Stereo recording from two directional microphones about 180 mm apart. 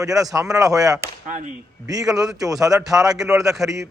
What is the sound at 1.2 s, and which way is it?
Speech, 45° right (ahead or behind).